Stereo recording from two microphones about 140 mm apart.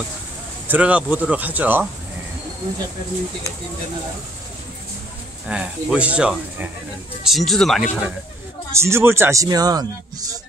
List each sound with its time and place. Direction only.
0.7 s speech: 10° right (ahead or behind)
5.5 s speech: 10° right (ahead or behind)
7.2 s speech: centre (ahead or behind)
8.7 s speech: 20° right (ahead or behind)